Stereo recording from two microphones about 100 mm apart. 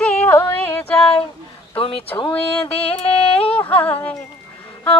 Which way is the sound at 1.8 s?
70° left (ahead or behind).